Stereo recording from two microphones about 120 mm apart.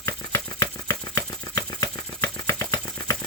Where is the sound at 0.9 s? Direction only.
20° left (ahead or behind).